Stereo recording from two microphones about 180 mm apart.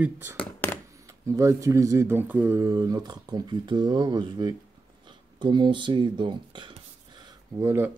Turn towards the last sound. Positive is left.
turn(degrees=-15)  # may be behind; listen again after turning